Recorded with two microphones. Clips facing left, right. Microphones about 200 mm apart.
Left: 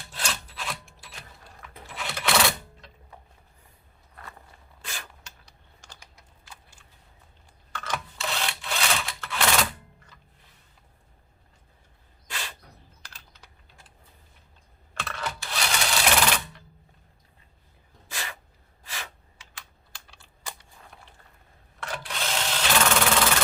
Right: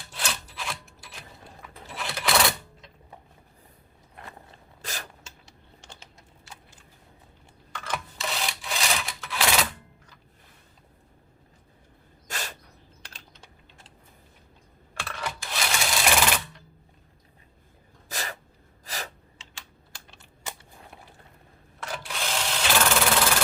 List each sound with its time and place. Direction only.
0.2 s rub: centre (ahead or behind)
1.6 s a sound: 5° right (ahead or behind)
4.8 s a sound: 40° right (ahead or behind)
5.2 s typing: 25° right (ahead or behind)
7.8 s rub: 5° right (ahead or behind)
12.3 s bird: 45° right (ahead or behind)
13.0 s typing: 25° right (ahead or behind)
14.9 s sewing machine: 10° right (ahead or behind)
18.1 s sneeze: 40° right (ahead or behind)
18.9 s gasp: 40° right (ahead or behind)
20.1 s typing: 20° right (ahead or behind)
21.8 s sewing machine: centre (ahead or behind)